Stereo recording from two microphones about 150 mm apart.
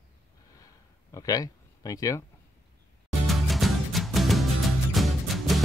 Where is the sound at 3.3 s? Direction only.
Centre (ahead or behind).